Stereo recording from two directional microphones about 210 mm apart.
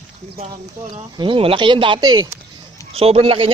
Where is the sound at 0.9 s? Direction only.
25° right (ahead or behind).